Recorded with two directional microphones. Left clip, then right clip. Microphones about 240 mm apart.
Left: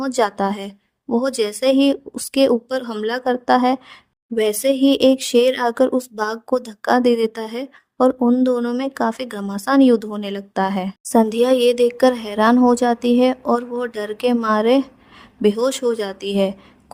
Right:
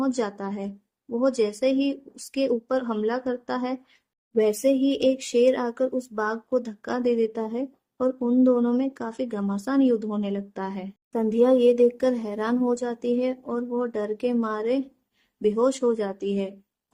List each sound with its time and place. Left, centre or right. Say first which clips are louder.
0.0 s speech: left 9 dB; left